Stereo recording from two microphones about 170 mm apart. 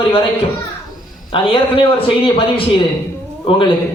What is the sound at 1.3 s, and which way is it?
Speech, 30° left (ahead or behind).